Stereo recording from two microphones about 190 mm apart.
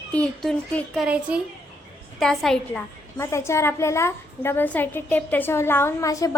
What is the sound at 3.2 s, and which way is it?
A woman's voice, 15° left (ahead or behind).